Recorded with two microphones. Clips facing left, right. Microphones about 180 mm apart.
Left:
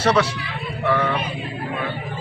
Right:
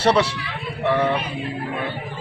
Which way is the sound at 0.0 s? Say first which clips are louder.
Right 1 dB; 30° right (ahead or behind).